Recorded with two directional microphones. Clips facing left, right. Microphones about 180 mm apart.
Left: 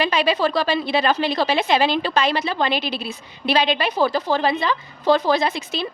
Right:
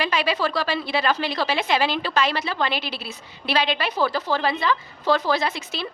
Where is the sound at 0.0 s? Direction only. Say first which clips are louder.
Left 4 dB; 20° left (ahead or behind).